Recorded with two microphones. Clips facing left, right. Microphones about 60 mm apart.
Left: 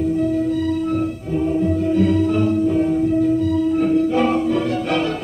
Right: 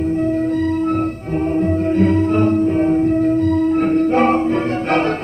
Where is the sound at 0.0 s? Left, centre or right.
Right.